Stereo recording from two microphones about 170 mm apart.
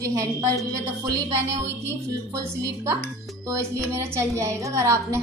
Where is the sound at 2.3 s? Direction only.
20° right (ahead or behind).